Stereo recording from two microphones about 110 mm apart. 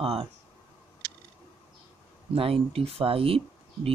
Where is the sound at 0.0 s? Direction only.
60° right (ahead or behind).